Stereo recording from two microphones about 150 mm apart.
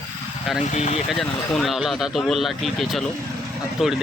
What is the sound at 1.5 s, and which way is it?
Speech, centre (ahead or behind).